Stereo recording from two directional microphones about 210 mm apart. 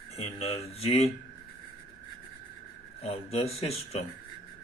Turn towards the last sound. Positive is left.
turn(degrees=30)  # may be behind; listen again after turning